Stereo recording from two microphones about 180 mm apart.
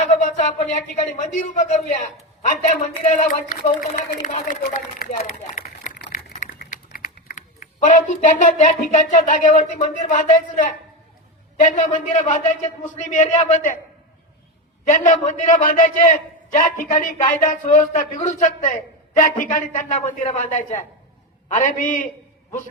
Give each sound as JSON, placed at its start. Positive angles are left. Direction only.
{"t": 0.0, "sound": "a sound", "side_deg": 45}
{"t": 0.4, "sound": "a man's voice", "side_deg": 40}
{"t": 3.0, "sound": "a man's voice", "side_deg": 45}
{"t": 5.5, "sound": "a sound", "side_deg": 45}
{"t": 6.6, "sound": "a man's voice", "side_deg": 55}
{"t": 14.8, "sound": "a man's voice", "side_deg": 45}